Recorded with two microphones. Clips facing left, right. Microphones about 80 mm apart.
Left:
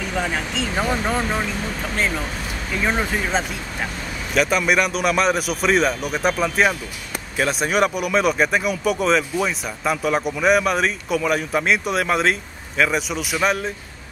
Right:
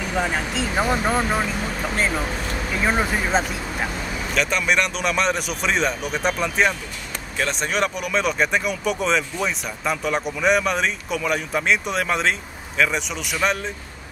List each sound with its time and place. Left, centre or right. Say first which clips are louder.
0.1 s speech: right 1 dB; centre